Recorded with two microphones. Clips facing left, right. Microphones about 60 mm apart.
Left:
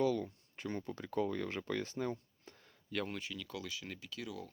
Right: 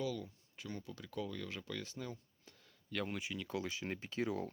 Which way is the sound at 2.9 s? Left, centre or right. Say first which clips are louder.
Left 1 dB; centre.